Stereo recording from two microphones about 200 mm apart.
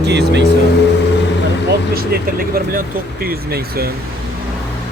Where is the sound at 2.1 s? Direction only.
50° right (ahead or behind).